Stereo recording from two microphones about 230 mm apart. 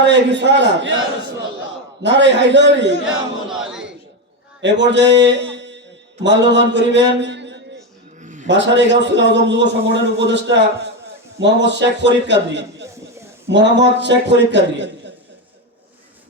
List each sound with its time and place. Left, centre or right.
0.0 s a man's voice: right
2.0 s a man's voice: right
3.5 s a sound: centre
4.6 s a man's voice: right
8.2 s a sound: right
8.4 s a man's voice: right